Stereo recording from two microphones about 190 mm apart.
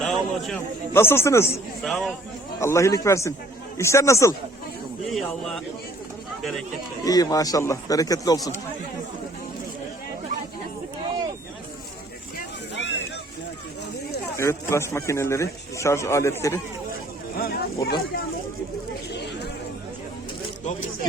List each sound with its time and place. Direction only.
0.0 s a sound: centre (ahead or behind)
0.9 s a man's voice: 15° left (ahead or behind)
1.8 s speech: centre (ahead or behind)
2.6 s a man's voice: 15° left (ahead or behind)
5.0 s speech: centre (ahead or behind)
7.0 s speech: 20° left (ahead or behind)
12.7 s a sound: 65° left (ahead or behind)
14.3 s a man's voice: 15° left (ahead or behind)
17.3 s a sound: 50° left (ahead or behind)
17.8 s speech: 55° left (ahead or behind)
19.1 s chatter: 60° left (ahead or behind)